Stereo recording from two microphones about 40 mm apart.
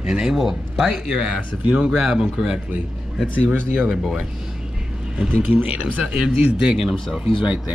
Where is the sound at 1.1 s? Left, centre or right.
Right.